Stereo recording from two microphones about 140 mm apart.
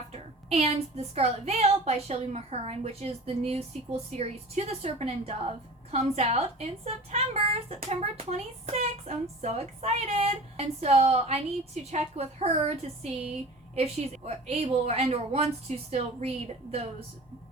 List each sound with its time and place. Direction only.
0.1 s a woman's voice: 45° right (ahead or behind)
14.3 s a woman's voice: 50° right (ahead or behind)